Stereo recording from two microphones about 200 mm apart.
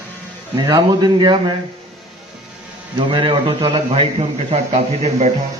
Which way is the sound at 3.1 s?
25° right (ahead or behind).